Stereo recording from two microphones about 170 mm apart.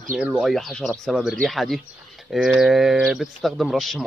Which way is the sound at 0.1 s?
5° right (ahead or behind).